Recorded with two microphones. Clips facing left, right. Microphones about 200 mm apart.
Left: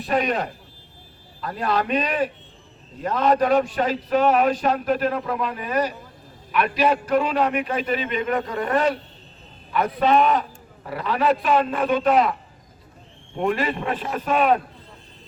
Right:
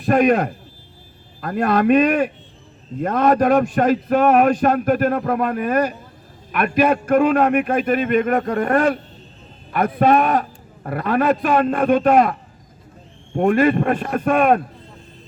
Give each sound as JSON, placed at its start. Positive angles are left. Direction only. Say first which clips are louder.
{"t": 0.0, "sound": "a man's voice", "louder": "right 7 dB", "side_deg": -50}